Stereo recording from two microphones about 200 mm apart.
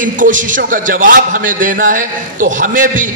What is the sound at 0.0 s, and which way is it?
A man's voice, 40° right (ahead or behind).